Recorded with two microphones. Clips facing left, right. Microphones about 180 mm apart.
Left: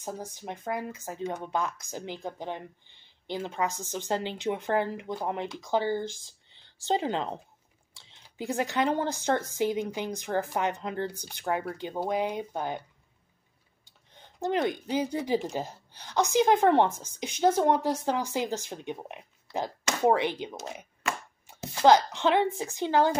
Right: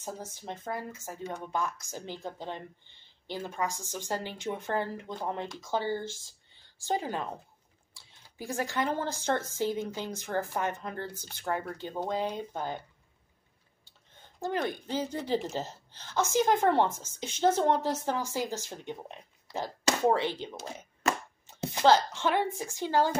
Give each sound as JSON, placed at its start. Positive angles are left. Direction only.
{"t": 0.0, "sound": "speech", "side_deg": 15}
{"t": 13.8, "sound": "speech", "side_deg": 20}
{"t": 21.8, "sound": "speech", "side_deg": 15}